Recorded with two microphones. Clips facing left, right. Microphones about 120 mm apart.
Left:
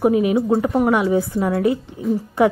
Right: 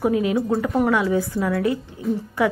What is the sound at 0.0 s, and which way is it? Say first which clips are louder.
Speech: left 4 dB; 20° left (ahead or behind).